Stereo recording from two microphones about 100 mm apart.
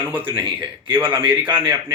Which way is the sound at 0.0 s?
20° right (ahead or behind).